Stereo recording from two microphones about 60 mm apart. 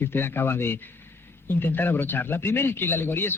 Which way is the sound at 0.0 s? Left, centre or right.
Left.